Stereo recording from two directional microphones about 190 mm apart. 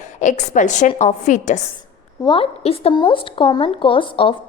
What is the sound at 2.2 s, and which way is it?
A woman's voice, 30° left (ahead or behind).